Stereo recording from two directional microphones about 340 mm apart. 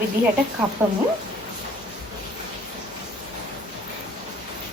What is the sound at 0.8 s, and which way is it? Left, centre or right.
Speech, centre.